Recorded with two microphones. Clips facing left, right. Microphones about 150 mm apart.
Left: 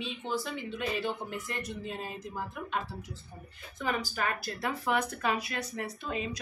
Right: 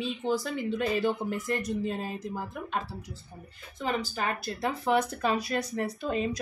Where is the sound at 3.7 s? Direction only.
30° right (ahead or behind).